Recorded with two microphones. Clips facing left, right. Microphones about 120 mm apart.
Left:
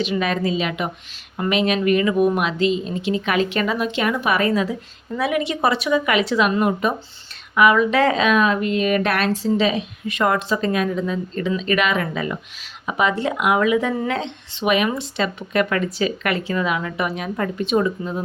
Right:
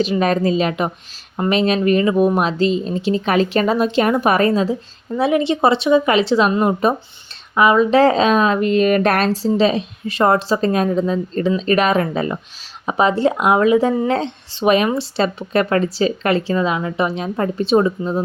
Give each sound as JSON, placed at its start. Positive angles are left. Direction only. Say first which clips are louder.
{"t": 0.0, "sound": "speech", "louder": "right 5 dB", "side_deg": -40}